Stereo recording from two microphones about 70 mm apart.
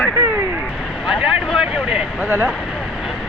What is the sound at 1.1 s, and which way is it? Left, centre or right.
Speech, centre.